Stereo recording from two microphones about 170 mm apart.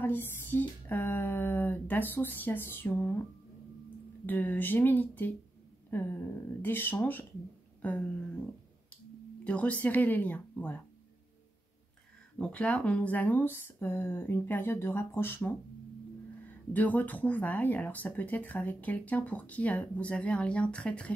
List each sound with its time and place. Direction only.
0.0 s speech: 10° left (ahead or behind)
4.3 s speech: 10° left (ahead or behind)
9.4 s speech: 5° left (ahead or behind)
12.4 s speech: 5° left (ahead or behind)
16.7 s speech: 10° left (ahead or behind)